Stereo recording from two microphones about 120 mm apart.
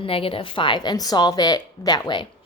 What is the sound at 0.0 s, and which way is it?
A woman's voice, 50° left (ahead or behind).